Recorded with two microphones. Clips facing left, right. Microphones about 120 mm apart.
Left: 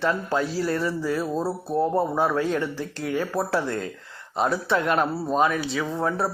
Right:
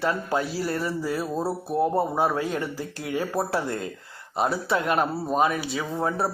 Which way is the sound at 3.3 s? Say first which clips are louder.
Left 1 dB; 10° right (ahead or behind).